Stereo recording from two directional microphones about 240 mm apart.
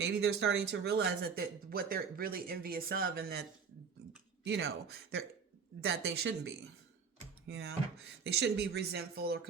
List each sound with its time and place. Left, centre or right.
0.0 s speech: right
4.4 s speech: right